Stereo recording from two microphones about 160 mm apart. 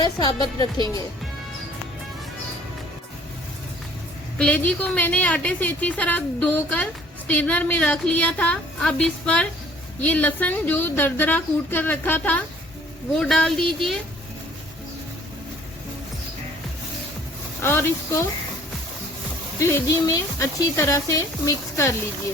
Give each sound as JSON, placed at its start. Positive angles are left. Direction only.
{"t": 0.0, "sound": "speech", "side_deg": 25}
{"t": 4.4, "sound": "a woman's voice", "side_deg": 10}
{"t": 17.6, "sound": "a woman's voice", "side_deg": 15}
{"t": 19.5, "sound": "speech", "side_deg": 15}